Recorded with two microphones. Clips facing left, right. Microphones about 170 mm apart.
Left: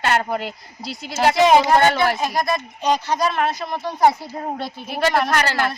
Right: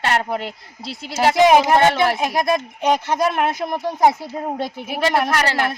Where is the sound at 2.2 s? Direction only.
55° right (ahead or behind).